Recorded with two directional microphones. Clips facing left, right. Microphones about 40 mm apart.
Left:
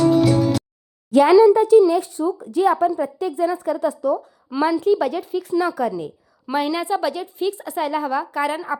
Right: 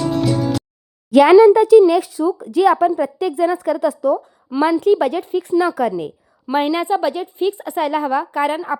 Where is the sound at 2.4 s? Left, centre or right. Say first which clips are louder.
Right 4 dB; right.